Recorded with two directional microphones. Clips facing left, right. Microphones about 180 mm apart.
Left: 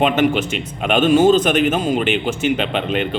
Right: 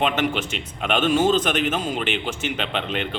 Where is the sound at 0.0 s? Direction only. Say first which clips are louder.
Left 7 dB; 10° left (ahead or behind).